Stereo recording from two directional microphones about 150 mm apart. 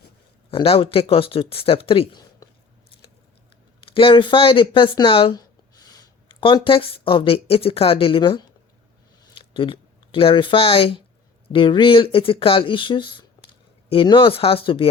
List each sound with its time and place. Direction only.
0.5 s speech: 40° left (ahead or behind)
3.8 s speech: 35° left (ahead or behind)